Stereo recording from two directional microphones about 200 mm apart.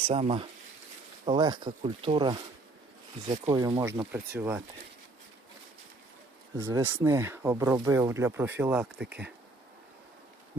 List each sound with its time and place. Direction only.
0.0 s speech: 30° right (ahead or behind)
3.5 s speech: 20° right (ahead or behind)
6.6 s speech: 15° right (ahead or behind)